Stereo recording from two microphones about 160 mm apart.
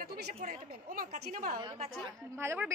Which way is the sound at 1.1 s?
45° right (ahead or behind).